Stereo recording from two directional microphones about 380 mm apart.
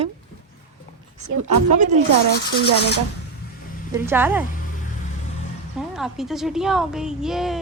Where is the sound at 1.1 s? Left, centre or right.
Right.